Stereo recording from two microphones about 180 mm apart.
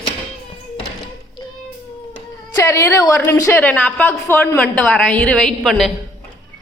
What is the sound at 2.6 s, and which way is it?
A woman's voice, 15° left (ahead or behind).